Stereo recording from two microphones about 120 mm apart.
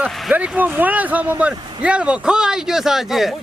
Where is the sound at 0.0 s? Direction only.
10° right (ahead or behind).